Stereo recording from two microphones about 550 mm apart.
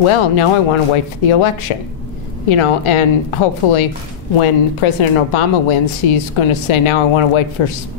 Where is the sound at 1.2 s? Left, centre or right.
Left.